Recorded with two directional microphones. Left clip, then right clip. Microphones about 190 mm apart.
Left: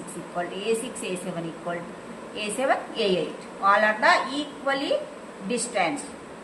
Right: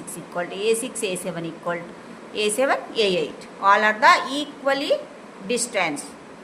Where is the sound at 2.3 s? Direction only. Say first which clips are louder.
Right 4 dB; 65° right (ahead or behind).